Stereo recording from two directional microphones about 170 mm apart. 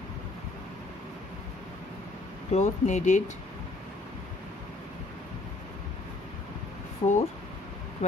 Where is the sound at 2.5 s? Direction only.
45° left (ahead or behind).